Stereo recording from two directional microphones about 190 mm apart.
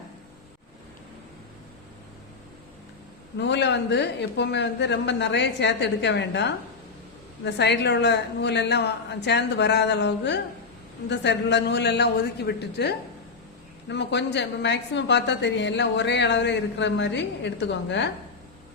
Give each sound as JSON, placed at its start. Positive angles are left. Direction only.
{"t": 3.3, "sound": "a man's voice", "side_deg": 65}